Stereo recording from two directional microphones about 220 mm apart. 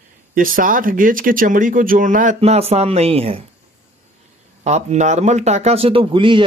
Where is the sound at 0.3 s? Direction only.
40° right (ahead or behind).